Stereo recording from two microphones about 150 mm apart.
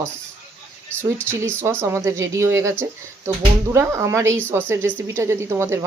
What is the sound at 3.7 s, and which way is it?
A woman's voice, 20° right (ahead or behind).